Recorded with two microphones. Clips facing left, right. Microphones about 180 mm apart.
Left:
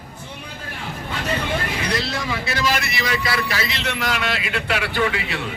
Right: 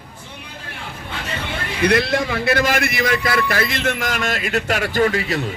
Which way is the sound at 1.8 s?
60° right (ahead or behind).